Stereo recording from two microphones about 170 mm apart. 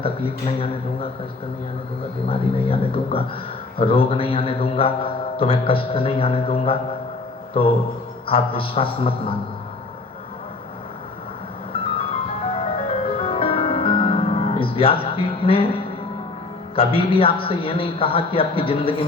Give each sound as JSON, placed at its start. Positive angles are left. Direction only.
{"t": 0.0, "sound": "a man's voice", "side_deg": 35}
{"t": 2.3, "sound": "a man's voice", "side_deg": 35}
{"t": 8.3, "sound": "a man's voice", "side_deg": 35}
{"t": 12.5, "sound": "music", "side_deg": 35}
{"t": 16.7, "sound": "a man's voice", "side_deg": 35}